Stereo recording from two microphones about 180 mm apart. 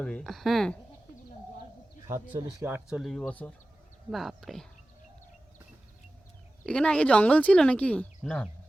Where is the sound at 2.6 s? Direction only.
10° right (ahead or behind).